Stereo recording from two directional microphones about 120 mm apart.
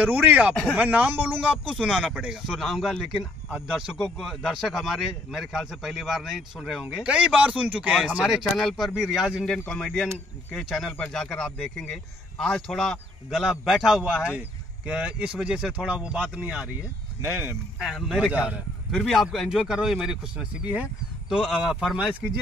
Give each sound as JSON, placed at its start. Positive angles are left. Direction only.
{"t": 0.0, "sound": "speech", "side_deg": -15}
{"t": 9.5, "sound": "speech", "side_deg": 5}
{"t": 17.2, "sound": "speech", "side_deg": -20}
{"t": 17.8, "sound": "speech", "side_deg": 0}
{"t": 18.9, "sound": "speech", "side_deg": 0}